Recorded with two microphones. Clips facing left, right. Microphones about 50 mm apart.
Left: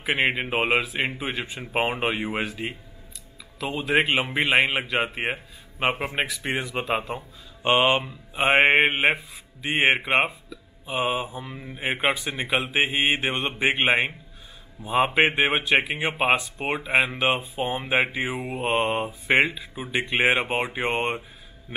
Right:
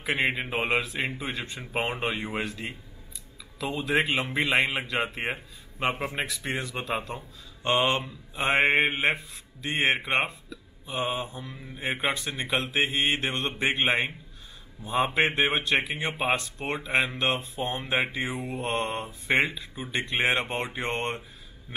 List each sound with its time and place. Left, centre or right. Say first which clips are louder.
0.4 s speech: left 4 dB; centre; by 9.1 s left
9.1 s speech: left 3 dB; centre